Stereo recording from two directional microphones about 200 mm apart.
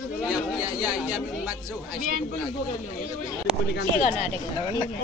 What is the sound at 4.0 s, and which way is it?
Speech, 40° left (ahead or behind).